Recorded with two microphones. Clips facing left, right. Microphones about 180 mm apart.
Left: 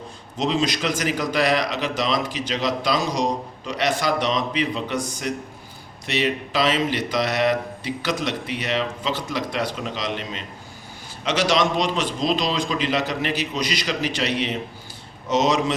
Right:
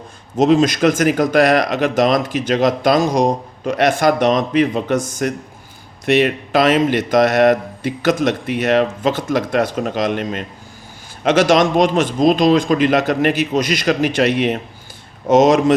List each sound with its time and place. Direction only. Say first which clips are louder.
0.3 s speech: right 10 dB; 50° right (ahead or behind)